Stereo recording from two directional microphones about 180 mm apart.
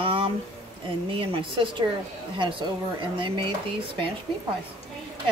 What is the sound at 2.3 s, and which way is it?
A woman's voice, 25° right (ahead or behind).